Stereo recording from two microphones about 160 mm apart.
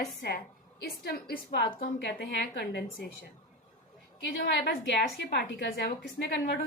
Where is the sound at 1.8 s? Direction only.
90° left.